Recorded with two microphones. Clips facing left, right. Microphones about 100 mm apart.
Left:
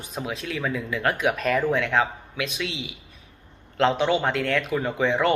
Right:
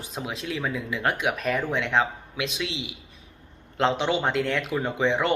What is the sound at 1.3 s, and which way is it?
Speech, 10° right (ahead or behind).